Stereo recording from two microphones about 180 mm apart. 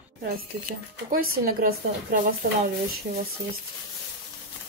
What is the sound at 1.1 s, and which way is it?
A woman's voice, 55° right (ahead or behind).